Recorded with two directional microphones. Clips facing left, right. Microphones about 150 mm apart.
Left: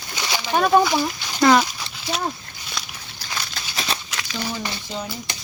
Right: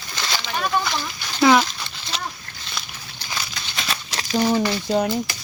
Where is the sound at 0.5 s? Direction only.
45° left (ahead or behind).